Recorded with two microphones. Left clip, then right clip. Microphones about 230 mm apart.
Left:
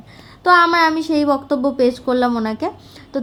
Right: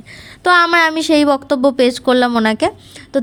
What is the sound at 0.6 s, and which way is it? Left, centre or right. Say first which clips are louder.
Speech: right 2 dB; right.